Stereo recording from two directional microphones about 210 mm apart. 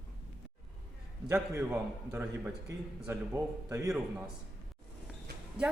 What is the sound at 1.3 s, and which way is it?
A man's voice, 10° right (ahead or behind).